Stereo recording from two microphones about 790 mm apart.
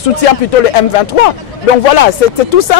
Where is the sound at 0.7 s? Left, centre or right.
Left.